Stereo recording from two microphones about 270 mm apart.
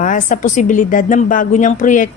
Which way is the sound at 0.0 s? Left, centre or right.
Left.